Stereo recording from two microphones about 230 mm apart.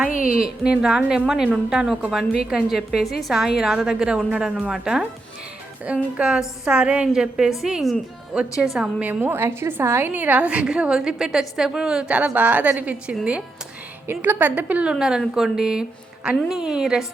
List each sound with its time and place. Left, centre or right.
0.1 s a woman's voice: left
0.4 s a woman's voice: centre